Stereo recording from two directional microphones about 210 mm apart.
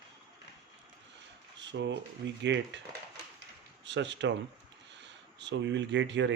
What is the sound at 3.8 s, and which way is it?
Speech, 60° right (ahead or behind).